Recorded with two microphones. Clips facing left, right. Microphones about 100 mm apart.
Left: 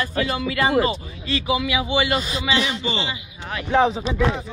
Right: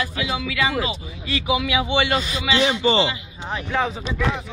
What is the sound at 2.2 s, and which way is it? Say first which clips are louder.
Speech: even; 30° left (ahead or behind).